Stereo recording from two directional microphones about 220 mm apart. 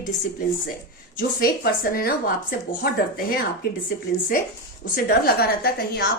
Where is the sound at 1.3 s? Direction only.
40° left (ahead or behind).